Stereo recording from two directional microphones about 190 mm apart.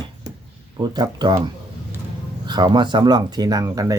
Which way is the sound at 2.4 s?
20° right (ahead or behind).